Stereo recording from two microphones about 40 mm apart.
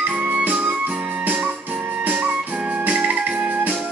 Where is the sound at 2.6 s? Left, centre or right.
Right.